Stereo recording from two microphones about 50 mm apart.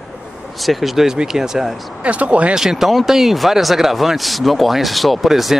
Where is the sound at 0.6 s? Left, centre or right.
Centre.